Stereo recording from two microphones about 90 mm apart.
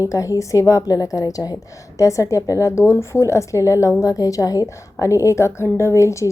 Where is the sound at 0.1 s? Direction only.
35° left (ahead or behind).